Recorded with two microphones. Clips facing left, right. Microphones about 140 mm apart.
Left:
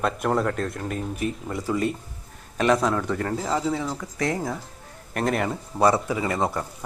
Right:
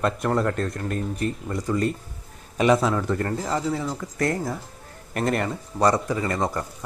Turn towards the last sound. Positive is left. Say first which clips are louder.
# even
turn(degrees=5)  # may be behind; listen again after turning